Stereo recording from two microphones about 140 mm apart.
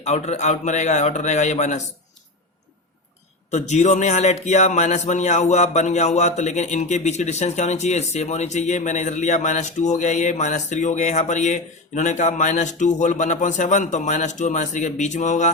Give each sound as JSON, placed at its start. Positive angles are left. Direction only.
{"t": 0.0, "sound": "speech", "side_deg": 50}
{"t": 3.5, "sound": "speech", "side_deg": 55}